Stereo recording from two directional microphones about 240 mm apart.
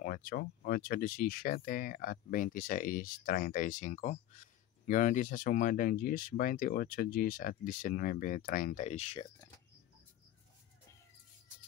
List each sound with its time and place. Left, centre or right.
0.0 s speech: left